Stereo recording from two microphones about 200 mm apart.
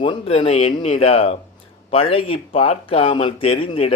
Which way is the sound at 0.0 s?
25° left (ahead or behind).